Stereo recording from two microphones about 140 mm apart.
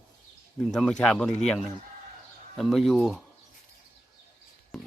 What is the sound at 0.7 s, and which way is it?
Speech, 5° left (ahead or behind).